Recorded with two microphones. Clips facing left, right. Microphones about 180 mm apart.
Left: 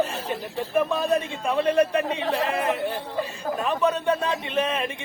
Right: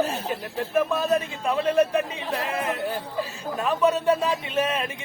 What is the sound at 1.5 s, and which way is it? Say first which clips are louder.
Speech: even; 5° right (ahead or behind).